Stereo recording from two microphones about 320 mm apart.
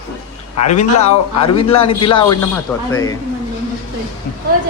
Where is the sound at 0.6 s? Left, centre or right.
Left; by 2.8 s centre.